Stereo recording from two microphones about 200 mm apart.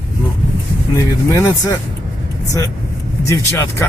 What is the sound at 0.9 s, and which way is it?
Speech, 15° left (ahead or behind).